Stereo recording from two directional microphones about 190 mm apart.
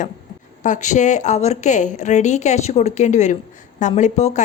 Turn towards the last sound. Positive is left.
turn(degrees=35)  # may be behind; listen again after turning